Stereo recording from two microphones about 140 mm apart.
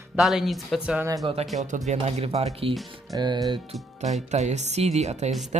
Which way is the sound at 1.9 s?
50° right (ahead or behind).